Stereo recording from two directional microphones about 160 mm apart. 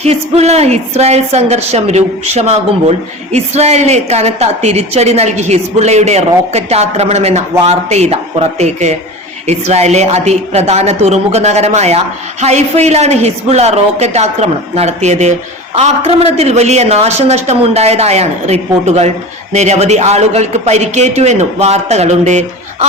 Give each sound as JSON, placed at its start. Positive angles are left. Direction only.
{"t": 0.0, "sound": "speech", "side_deg": -40}